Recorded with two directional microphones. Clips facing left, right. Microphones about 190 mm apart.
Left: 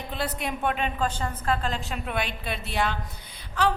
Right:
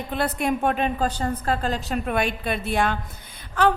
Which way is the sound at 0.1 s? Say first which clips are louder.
Right 7 dB; 50° right (ahead or behind).